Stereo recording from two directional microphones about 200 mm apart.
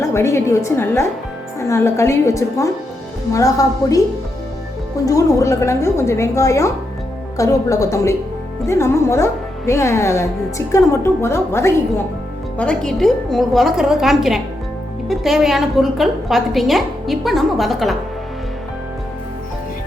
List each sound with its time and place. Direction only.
0.1 s a woman's voice: 15° left (ahead or behind)
5.0 s a woman's voice: 15° left (ahead or behind); by 17.9 s centre (ahead or behind)